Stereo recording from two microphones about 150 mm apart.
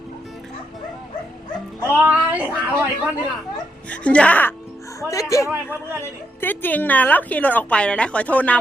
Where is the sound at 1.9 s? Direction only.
10° right (ahead or behind).